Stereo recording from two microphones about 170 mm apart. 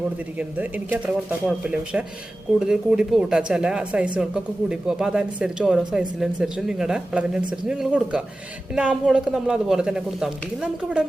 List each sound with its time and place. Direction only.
0.3 s speech: 10° right (ahead or behind)